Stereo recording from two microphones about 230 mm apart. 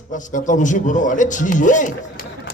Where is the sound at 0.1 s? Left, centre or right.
Left.